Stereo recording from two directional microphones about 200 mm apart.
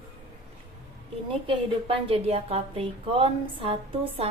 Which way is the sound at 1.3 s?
25° right (ahead or behind).